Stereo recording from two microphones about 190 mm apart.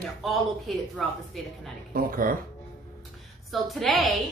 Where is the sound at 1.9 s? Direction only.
45° right (ahead or behind).